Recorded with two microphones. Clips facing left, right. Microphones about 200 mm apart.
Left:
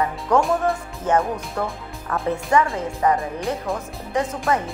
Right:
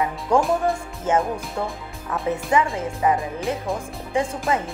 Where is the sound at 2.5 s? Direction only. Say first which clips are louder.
Left 2 dB; 15° right (ahead or behind).